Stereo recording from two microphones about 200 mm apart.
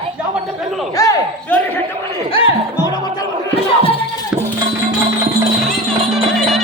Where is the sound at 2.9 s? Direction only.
20° left (ahead or behind).